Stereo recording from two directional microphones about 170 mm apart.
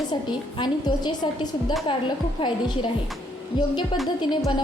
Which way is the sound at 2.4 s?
30° left (ahead or behind).